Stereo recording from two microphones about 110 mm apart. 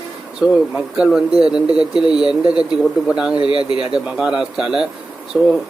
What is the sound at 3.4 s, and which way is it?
Speech, 50° left (ahead or behind).